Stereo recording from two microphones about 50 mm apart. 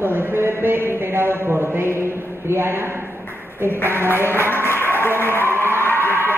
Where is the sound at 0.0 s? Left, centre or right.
Right.